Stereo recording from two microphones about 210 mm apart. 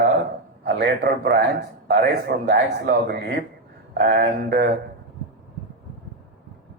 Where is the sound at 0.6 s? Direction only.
45° right (ahead or behind).